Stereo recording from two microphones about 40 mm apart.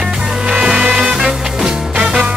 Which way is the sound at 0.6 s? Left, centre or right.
Right.